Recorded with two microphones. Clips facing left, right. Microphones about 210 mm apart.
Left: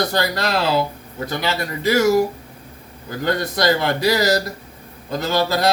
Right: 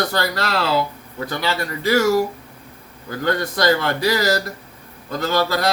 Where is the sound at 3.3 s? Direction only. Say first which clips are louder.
Even; 15° left (ahead or behind).